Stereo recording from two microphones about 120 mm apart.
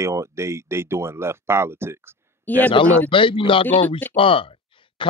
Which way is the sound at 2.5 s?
15° left (ahead or behind).